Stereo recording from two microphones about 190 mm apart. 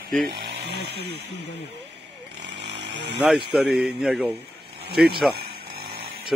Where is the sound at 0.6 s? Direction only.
60° right (ahead or behind).